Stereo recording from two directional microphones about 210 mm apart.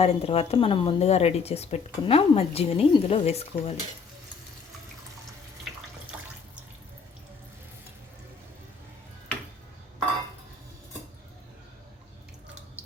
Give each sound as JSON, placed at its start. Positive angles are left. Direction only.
{"t": 0.0, "sound": "speech", "side_deg": 30}